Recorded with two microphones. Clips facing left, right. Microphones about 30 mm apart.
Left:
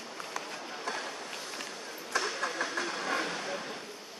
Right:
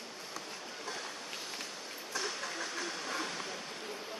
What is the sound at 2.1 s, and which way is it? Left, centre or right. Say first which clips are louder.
Train: left 6 dB; left.